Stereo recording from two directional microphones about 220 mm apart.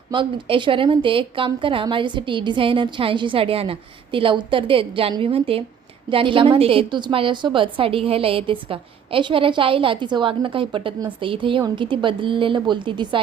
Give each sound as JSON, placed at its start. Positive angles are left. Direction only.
{"t": 0.1, "sound": "a woman's voice", "side_deg": -20}